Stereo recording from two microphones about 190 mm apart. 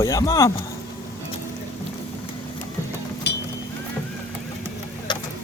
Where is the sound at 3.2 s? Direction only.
60° left (ahead or behind).